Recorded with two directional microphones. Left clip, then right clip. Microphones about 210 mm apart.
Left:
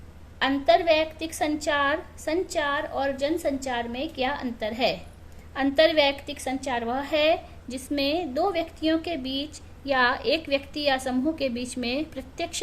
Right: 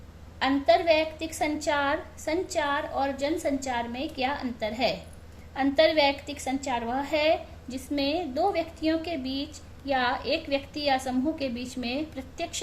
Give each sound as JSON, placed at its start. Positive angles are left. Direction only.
{"t": 0.3, "sound": "a woman's voice", "side_deg": 20}